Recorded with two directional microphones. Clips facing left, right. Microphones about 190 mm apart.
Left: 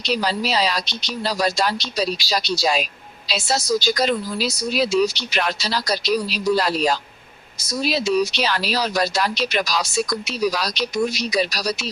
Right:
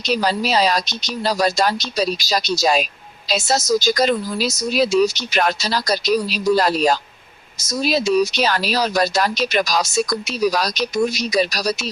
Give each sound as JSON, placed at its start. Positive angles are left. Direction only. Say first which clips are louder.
{"t": 0.0, "sound": "speech", "louder": "right 3 dB", "side_deg": -45}